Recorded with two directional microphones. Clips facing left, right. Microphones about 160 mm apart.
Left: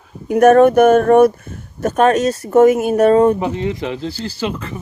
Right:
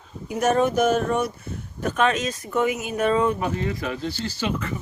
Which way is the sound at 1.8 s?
40° left (ahead or behind).